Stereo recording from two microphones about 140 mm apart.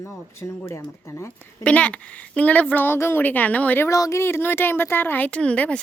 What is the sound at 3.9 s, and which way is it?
A woman's voice, 25° left (ahead or behind).